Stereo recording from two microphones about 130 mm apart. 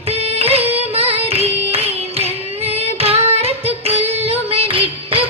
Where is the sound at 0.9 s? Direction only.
50° right (ahead or behind).